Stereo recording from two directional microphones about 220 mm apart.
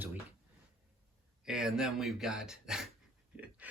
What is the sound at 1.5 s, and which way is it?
Speech, 5° right (ahead or behind).